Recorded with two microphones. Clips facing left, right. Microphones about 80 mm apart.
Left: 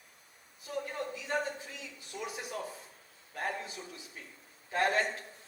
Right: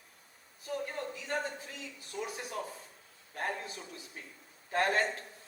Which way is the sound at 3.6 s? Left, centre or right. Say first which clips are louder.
Even; right.